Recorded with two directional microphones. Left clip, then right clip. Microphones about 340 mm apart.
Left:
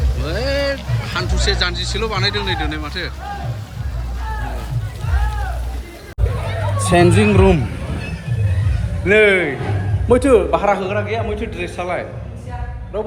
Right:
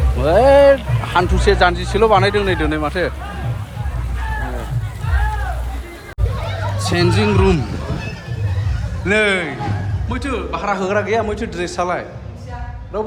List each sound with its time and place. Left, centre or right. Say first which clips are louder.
0.3 s speech: right 11 dB; centre
6.7 s a man's voice: left 4 dB; centre
9.0 s a man's voice: left 3 dB; centre